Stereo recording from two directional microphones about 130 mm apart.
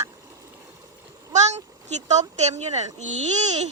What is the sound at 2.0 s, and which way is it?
Speech, 65° right (ahead or behind).